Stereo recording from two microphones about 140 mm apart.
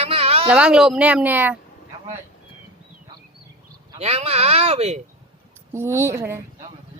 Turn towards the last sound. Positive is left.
turn(degrees=-15)  # may be behind; listen again after turning